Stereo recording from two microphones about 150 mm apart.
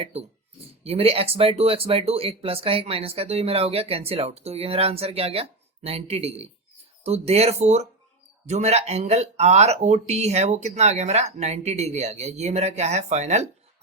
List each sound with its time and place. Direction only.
0.0 s speech: 45° right (ahead or behind)